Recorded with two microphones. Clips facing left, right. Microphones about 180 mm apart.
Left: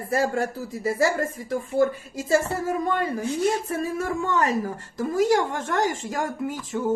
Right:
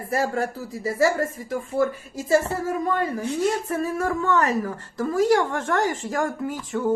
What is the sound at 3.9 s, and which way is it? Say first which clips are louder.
Speech: right 4 dB; 20° left (ahead or behind).